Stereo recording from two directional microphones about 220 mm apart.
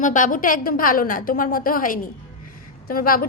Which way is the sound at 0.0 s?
35° left (ahead or behind).